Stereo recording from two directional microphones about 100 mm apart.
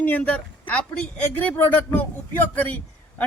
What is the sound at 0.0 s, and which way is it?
A woman's voice, 15° left (ahead or behind).